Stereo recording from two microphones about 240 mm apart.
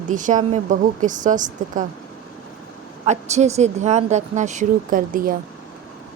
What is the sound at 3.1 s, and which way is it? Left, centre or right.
Speech, right.